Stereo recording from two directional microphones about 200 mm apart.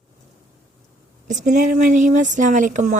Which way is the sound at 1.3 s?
40° right (ahead or behind).